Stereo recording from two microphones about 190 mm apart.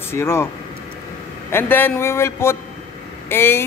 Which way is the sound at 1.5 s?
10° left (ahead or behind).